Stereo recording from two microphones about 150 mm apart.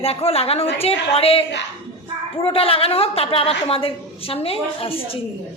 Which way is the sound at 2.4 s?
40° left (ahead or behind).